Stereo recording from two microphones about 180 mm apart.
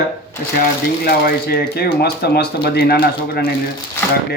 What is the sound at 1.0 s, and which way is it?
A man's voice, 60° left (ahead or behind).